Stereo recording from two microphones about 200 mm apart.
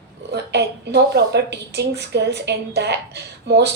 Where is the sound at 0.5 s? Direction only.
55° right (ahead or behind).